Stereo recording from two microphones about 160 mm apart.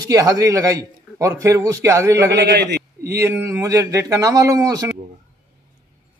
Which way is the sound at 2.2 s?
90° right.